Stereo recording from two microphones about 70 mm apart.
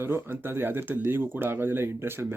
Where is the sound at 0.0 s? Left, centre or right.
Right.